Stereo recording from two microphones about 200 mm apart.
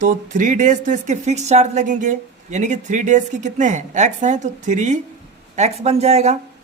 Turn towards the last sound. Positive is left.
turn(degrees=-30)  # may be behind; listen again after turning